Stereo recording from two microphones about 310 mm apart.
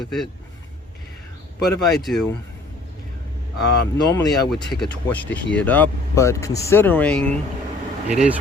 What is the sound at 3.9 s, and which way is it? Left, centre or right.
Speech, centre.